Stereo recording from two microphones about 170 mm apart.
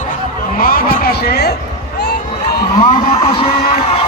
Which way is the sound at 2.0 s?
70° left (ahead or behind).